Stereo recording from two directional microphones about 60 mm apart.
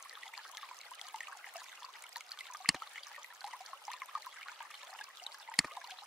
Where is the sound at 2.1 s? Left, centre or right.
Centre.